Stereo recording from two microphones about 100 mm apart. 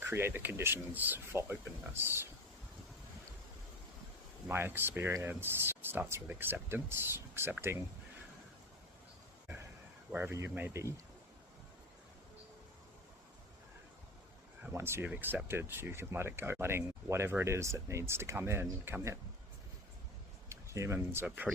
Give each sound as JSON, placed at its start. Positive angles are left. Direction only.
{"t": 0.0, "sound": "speech", "side_deg": -25}
{"t": 4.4, "sound": "speech", "side_deg": -20}
{"t": 10.1, "sound": "speech", "side_deg": -20}
{"t": 14.7, "sound": "speech", "side_deg": -25}
{"t": 20.5, "sound": "speech", "side_deg": -30}